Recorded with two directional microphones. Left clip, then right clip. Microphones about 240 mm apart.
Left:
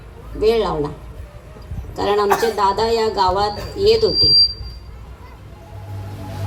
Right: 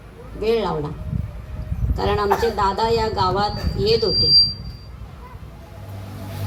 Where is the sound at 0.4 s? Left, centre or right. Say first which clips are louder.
Left 4 dB; left.